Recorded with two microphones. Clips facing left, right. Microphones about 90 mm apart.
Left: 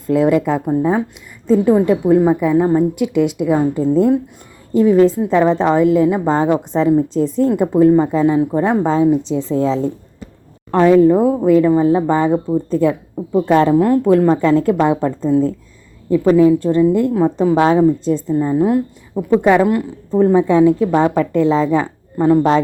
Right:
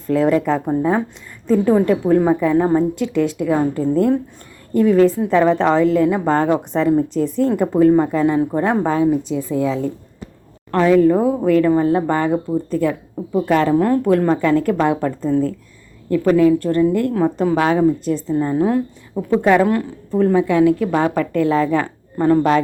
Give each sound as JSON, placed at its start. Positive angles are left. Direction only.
{"t": 0.1, "sound": "a woman's voice", "side_deg": 15}
{"t": 8.4, "sound": "a woman's voice", "side_deg": 5}
{"t": 8.9, "sound": "a woman's voice", "side_deg": 20}